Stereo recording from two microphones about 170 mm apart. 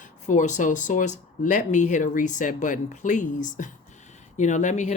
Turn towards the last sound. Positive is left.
turn(degrees=45)  # may be behind; listen again after turning